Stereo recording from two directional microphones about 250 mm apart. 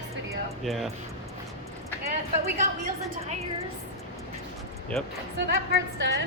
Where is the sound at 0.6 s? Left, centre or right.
Centre.